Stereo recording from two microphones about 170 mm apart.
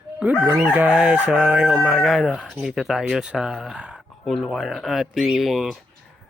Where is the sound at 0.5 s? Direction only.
10° right (ahead or behind).